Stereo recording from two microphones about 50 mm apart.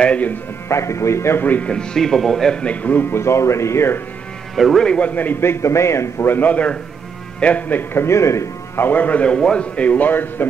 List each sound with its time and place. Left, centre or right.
0.0 s music: left
0.7 s a man's voice: left
1.4 s a man's voice: left
1.7 s a man's voice: centre
2.6 s a man's voice: left
3.1 s speech: left
4.6 s a man's voice: centre
4.8 s a man's voice: left
5.1 s a man's voice: left
5.4 s a man's voice: left
6.2 s a man's voice: left
7.6 s a man's voice: left
8.0 s a man's voice: left
8.7 s a man's voice: left